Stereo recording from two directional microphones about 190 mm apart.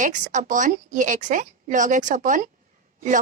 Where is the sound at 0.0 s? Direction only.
40° right (ahead or behind).